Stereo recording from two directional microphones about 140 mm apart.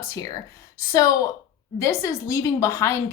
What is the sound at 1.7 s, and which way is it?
A woman's voice, 20° left (ahead or behind).